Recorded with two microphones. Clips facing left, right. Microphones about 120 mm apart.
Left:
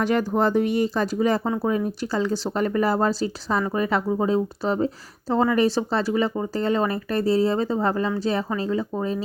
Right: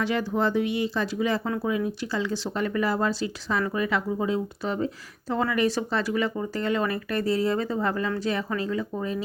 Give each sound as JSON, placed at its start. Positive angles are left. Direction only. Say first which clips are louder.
{"t": 0.0, "sound": "speech", "louder": "left 4 dB", "side_deg": 45}